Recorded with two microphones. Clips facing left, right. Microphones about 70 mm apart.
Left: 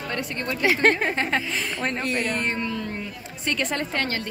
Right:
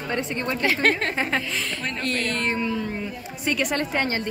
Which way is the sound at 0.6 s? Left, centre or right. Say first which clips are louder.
Left 3 dB; centre.